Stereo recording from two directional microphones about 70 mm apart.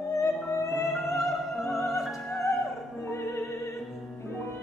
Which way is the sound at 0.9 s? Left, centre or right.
Centre.